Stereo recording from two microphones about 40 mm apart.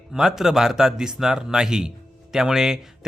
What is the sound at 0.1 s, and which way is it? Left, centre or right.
Speech, centre.